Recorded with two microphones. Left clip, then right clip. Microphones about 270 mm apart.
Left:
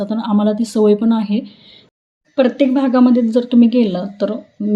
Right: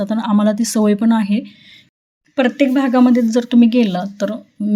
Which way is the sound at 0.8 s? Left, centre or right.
Right.